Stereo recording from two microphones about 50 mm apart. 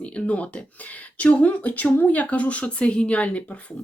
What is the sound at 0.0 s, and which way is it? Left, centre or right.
Speech, left.